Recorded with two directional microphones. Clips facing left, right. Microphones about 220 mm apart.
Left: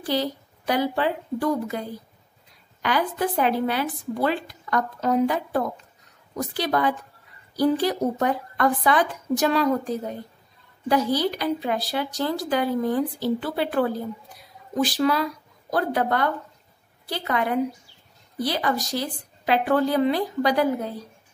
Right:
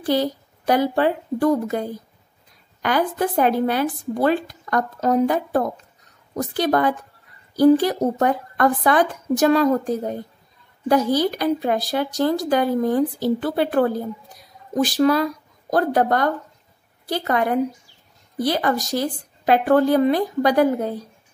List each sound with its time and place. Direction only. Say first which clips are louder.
0.0 s speech: right 5 dB; 45° right (ahead or behind)